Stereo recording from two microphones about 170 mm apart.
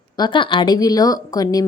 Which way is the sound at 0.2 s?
30° left (ahead or behind).